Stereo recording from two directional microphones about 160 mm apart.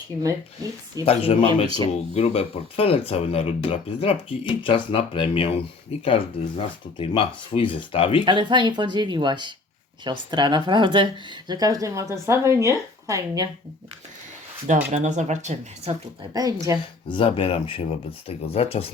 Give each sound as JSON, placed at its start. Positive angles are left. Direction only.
{"t": 1.0, "sound": "speech", "side_deg": 40}
{"t": 8.2, "sound": "speech", "side_deg": -30}
{"t": 14.8, "sound": "speech", "side_deg": -50}
{"t": 16.2, "sound": "speech", "side_deg": -25}
{"t": 17.1, "sound": "speech", "side_deg": 35}